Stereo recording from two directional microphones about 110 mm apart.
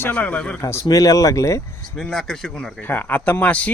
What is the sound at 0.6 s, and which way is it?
Speech, 25° left (ahead or behind).